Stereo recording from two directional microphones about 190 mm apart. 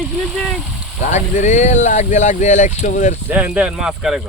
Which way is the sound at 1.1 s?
40° left (ahead or behind).